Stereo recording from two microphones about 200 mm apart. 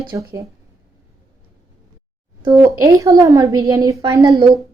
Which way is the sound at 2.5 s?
15° right (ahead or behind).